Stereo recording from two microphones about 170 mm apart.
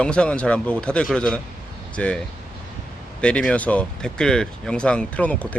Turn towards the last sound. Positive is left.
turn(degrees=10)  # may be behind; listen again after turning